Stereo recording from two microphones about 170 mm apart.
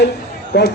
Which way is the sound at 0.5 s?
70° left (ahead or behind).